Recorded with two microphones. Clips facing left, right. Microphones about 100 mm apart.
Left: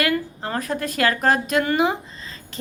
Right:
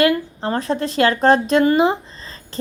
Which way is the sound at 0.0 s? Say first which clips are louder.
Right 6 dB; 30° right (ahead or behind).